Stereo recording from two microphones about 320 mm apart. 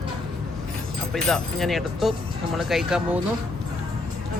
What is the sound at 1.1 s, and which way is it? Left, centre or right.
Speech, centre.